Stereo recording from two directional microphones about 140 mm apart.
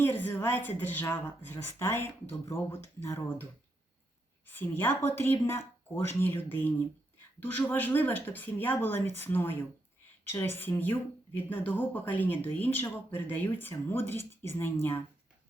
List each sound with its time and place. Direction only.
0.0 s speech: 15° left (ahead or behind)
4.4 s speech: 15° left (ahead or behind)